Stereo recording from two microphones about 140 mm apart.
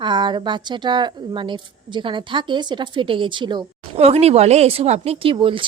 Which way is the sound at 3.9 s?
45° right (ahead or behind).